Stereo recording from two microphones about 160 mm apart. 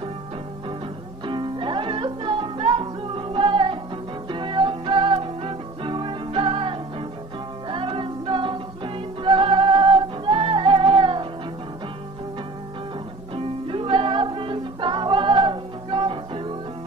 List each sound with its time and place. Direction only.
1.2 s music: 30° right (ahead or behind)
13.3 s music: 35° right (ahead or behind)